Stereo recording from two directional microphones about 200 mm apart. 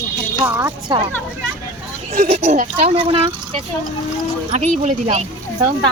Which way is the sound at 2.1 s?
35° right (ahead or behind).